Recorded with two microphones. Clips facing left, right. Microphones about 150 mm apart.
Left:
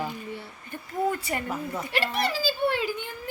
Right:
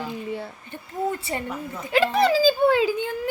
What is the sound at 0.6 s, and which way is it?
Speech, 25° right (ahead or behind).